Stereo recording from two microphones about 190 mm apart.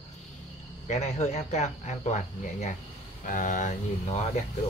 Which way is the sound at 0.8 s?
35° left (ahead or behind).